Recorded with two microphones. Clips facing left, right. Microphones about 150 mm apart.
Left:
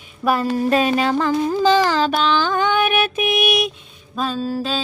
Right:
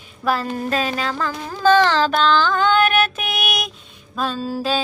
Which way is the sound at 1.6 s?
10° left (ahead or behind).